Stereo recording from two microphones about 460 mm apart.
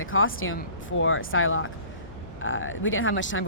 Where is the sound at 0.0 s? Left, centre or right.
Left.